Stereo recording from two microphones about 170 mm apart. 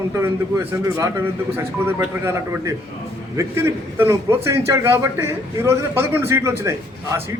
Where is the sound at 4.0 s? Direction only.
15° right (ahead or behind).